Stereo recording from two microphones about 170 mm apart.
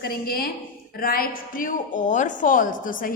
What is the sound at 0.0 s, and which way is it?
A woman's voice, 60° left (ahead or behind).